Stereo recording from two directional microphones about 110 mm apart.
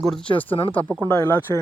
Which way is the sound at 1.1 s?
25° left (ahead or behind).